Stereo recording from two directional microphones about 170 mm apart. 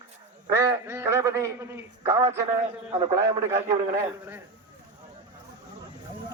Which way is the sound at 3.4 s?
15° right (ahead or behind).